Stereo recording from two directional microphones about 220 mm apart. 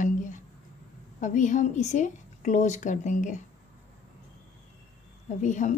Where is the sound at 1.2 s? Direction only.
35° left (ahead or behind).